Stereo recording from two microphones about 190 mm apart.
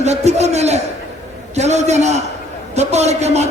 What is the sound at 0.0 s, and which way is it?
A man's voice, 35° right (ahead or behind).